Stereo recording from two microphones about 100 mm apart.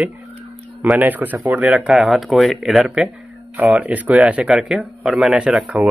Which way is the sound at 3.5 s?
15° right (ahead or behind).